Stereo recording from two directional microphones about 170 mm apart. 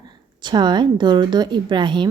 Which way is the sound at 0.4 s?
25° right (ahead or behind).